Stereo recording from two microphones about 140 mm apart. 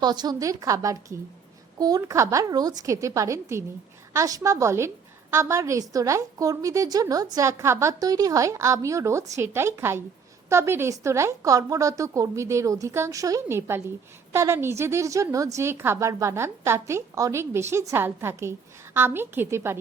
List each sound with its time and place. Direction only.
0.0 s a woman's voice: 30° right (ahead or behind)